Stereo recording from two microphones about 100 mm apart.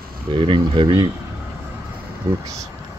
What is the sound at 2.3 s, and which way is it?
Speech, 35° right (ahead or behind).